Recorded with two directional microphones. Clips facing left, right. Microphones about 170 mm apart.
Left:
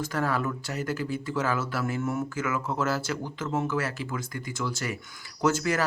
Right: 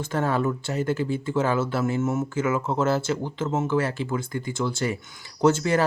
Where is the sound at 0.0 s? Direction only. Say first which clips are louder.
Right 4 dB; 25° right (ahead or behind).